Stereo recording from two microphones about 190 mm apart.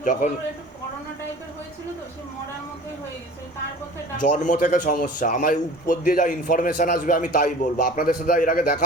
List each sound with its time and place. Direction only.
0.0 s speech: 45° left (ahead or behind)
4.2 s a man's voice: 40° left (ahead or behind)